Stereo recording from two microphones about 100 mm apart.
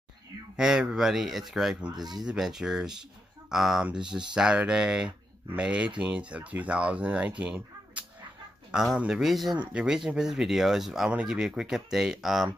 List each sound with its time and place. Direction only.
0.6 s speech: 5° right (ahead or behind)
1.9 s speech: 45° right (ahead or behind)
2.2 s speech: 5° right (ahead or behind)